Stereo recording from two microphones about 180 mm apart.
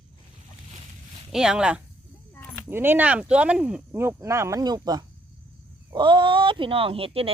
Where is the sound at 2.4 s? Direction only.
10° left (ahead or behind).